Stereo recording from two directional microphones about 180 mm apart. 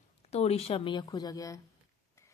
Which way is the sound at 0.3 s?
35° left (ahead or behind).